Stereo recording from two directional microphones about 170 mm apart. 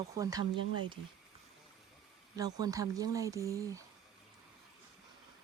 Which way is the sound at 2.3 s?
20° right (ahead or behind).